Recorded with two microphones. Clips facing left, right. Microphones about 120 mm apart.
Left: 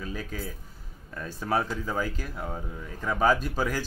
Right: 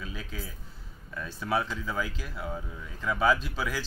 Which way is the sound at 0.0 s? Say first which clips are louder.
Left 5 dB; 45° left (ahead or behind).